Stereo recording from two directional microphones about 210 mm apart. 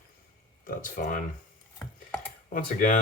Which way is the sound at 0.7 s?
40° left (ahead or behind).